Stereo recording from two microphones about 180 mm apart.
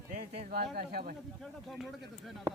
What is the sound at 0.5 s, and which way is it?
Speech, 60° right (ahead or behind).